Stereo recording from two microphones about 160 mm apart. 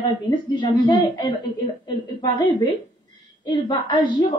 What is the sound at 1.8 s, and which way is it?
A woman's voice, 25° left (ahead or behind).